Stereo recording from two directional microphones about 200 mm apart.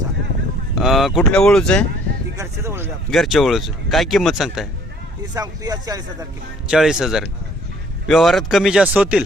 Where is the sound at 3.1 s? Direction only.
Centre (ahead or behind).